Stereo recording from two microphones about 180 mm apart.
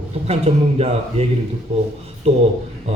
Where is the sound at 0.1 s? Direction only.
35° right (ahead or behind).